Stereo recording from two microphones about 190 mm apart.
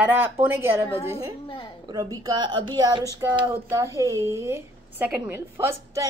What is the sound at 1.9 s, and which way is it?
Speech, 20° right (ahead or behind).